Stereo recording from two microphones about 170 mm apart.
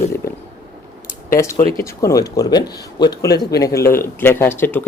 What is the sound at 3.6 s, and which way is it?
Speech, 15° left (ahead or behind).